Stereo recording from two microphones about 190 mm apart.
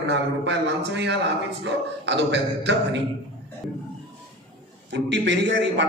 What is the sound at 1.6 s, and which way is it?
A man's voice, 70° right (ahead or behind).